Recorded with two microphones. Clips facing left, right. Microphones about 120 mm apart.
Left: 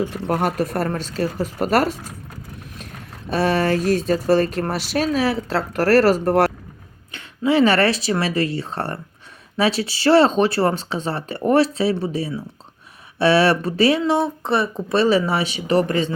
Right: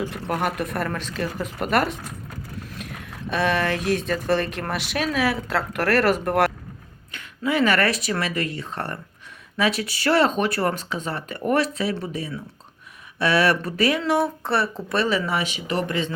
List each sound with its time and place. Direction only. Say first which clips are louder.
0.1 s speech: left 4 dB; 35° left (ahead or behind)